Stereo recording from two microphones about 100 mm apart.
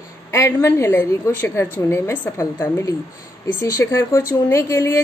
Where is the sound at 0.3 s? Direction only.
25° left (ahead or behind).